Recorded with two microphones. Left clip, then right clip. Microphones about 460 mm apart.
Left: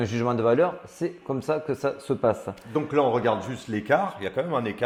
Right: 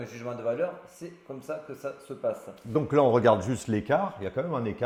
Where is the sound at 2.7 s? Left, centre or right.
Right.